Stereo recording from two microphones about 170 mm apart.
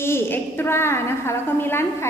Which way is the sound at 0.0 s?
15° left (ahead or behind).